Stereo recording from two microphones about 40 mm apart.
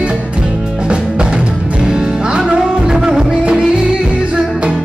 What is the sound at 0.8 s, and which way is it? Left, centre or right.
Music, right.